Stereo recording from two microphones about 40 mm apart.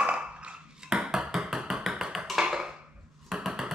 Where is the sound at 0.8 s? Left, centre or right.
Centre.